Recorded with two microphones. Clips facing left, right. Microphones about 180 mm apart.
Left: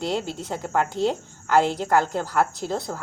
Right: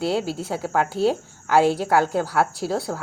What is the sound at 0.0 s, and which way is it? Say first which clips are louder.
A woman's voice: right 3 dB; 5° right (ahead or behind).